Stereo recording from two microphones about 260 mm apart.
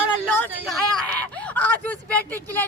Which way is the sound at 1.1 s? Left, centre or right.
Centre.